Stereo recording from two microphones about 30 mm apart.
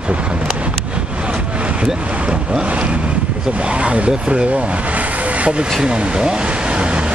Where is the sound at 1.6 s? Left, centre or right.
Right.